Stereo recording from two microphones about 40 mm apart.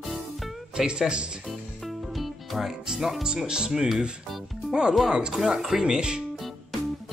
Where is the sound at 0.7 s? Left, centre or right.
Centre.